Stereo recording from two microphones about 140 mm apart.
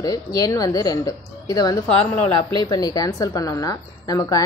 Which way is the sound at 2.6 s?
25° left (ahead or behind).